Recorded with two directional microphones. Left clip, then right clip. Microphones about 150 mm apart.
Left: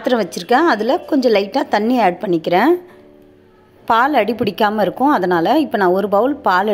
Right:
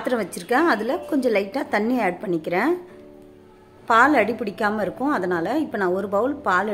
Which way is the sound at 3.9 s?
30° left (ahead or behind).